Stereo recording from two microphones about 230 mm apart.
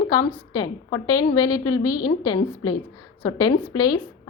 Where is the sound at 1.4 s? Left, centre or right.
Left.